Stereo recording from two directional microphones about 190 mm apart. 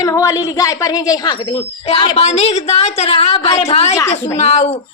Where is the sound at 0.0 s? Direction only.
15° left (ahead or behind).